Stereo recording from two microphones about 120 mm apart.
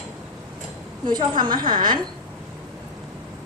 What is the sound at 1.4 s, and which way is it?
Speech, 40° right (ahead or behind).